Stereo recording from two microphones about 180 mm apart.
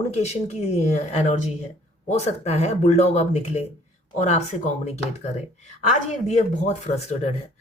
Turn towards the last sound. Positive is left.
turn(degrees=40)  # may be behind; listen again after turning